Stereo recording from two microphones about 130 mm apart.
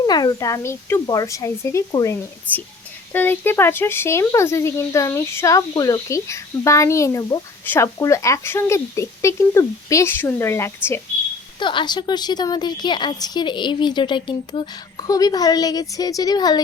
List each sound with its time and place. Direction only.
0.0 s speech: 30° left (ahead or behind)
3.1 s speech: 15° left (ahead or behind)
11.6 s a woman's voice: 40° left (ahead or behind)